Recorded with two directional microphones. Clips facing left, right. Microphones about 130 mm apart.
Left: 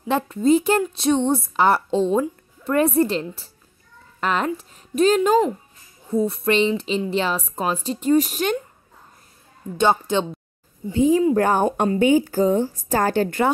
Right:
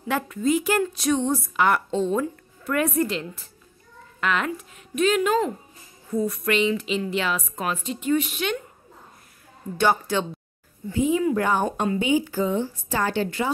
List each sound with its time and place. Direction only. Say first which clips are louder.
0.1 s a woman's voice: left 5 dB; 30° left (ahead or behind)
9.8 s a woman's voice: left 3 dB; 20° left (ahead or behind)
10.9 s a woman's voice: left 5 dB; 30° left (ahead or behind); by 13.5 s 45° left (ahead or behind)